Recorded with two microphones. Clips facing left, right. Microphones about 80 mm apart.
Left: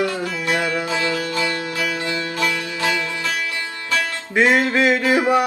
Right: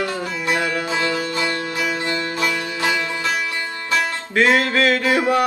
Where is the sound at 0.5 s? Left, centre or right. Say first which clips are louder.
Even; centre.